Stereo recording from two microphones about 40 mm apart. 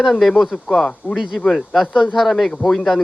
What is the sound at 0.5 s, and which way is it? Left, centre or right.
Speech, centre.